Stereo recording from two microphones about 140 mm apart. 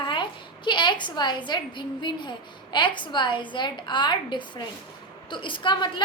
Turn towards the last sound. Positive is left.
turn(degrees=35)  # may be behind; listen again after turning